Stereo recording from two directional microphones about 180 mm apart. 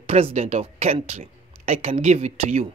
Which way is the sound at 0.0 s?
35° right (ahead or behind).